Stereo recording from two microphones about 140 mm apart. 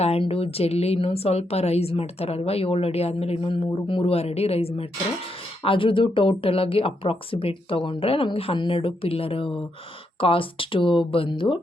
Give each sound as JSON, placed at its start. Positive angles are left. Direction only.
{"t": 0.0, "sound": "a woman's voice", "side_deg": 45}